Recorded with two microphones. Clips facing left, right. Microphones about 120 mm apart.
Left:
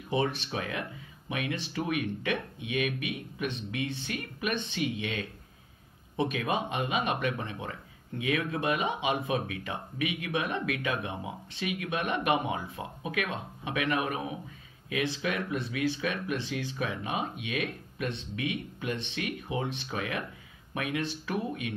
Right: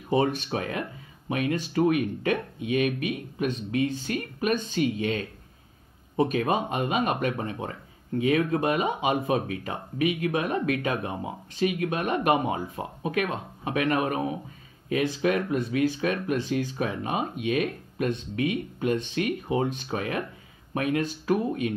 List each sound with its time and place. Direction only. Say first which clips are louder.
0.1 s speech: right 5 dB; 45° right (ahead or behind)